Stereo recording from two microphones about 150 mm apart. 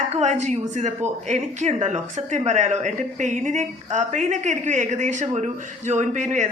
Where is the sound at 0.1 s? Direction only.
50° right (ahead or behind).